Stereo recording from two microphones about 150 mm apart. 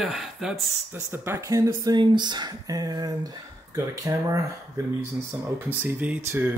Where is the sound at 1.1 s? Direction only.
15° right (ahead or behind).